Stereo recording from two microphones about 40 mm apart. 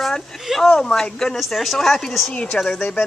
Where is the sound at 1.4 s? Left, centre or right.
Centre.